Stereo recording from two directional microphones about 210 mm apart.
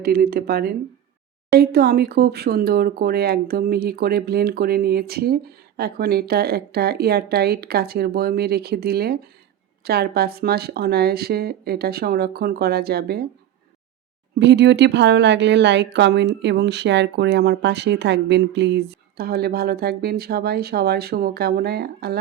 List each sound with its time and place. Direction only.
0.0 s speech: 45° right (ahead or behind)
14.3 s a woman's voice: 55° right (ahead or behind)